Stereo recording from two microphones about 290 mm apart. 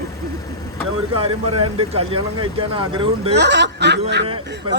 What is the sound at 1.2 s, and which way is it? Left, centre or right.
Speech, centre.